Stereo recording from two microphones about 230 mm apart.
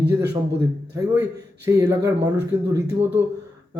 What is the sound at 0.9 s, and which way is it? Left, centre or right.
Speech, centre.